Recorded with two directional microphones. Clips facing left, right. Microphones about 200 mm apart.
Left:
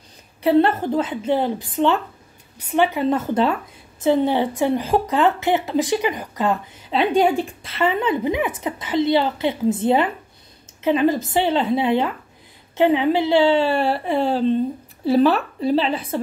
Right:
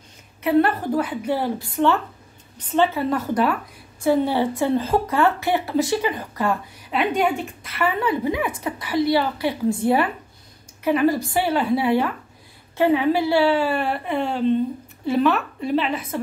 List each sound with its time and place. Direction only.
0.4 s a woman's voice: 30° left (ahead or behind)